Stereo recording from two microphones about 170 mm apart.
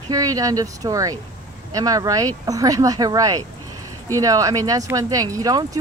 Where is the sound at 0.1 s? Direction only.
20° right (ahead or behind).